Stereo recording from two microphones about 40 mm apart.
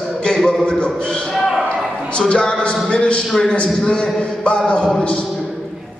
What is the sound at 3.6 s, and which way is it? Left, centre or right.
Speech, left.